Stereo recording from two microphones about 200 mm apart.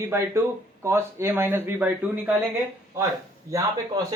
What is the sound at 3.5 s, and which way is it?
Speech, 15° right (ahead or behind).